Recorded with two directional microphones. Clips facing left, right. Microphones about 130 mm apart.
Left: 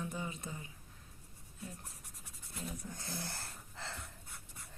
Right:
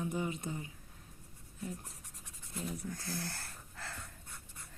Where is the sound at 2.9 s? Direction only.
25° left (ahead or behind).